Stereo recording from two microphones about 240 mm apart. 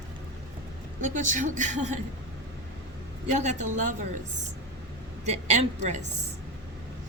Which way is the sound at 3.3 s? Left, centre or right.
Right.